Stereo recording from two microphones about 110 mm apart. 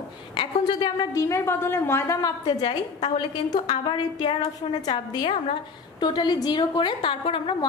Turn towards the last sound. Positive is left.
turn(degrees=55)  # may be behind; listen again after turning